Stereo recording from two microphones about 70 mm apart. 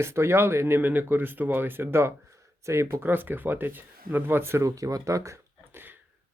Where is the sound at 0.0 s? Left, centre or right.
Right.